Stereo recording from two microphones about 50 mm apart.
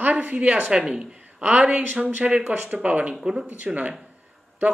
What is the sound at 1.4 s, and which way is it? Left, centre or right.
Speech, right.